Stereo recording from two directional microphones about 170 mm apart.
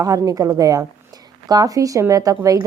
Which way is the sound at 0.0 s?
20° right (ahead or behind).